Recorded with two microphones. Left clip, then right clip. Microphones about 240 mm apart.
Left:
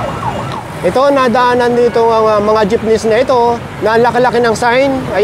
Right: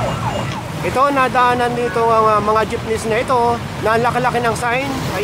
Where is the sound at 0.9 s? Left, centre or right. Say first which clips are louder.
Left 4 dB; left.